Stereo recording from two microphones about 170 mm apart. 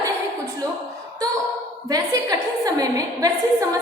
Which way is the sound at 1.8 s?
20° right (ahead or behind).